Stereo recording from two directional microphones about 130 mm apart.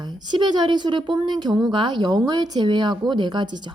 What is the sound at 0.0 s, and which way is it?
Speech, 35° right (ahead or behind).